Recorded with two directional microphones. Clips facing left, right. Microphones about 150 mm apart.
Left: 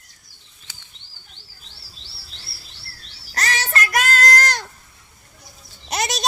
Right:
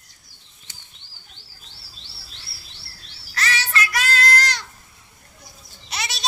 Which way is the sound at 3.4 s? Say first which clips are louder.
Left 1 dB; 45° left (ahead or behind).